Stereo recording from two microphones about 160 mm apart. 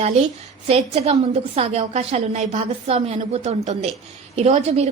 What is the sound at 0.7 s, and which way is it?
A woman's voice, 40° right (ahead or behind).